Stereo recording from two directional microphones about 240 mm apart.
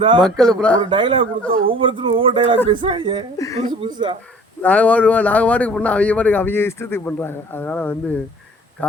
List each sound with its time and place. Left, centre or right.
0.0 s speech: centre
0.3 s speech: centre
0.9 s speech: right
3.3 s a man's voice: centre
3.7 s speech: centre
4.6 s a man's voice: centre